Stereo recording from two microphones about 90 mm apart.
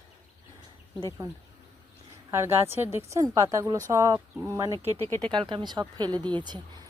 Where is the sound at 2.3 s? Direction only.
30° right (ahead or behind).